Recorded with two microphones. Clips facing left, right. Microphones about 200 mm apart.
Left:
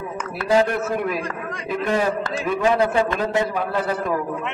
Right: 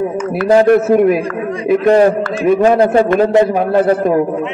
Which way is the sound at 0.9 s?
50° right (ahead or behind).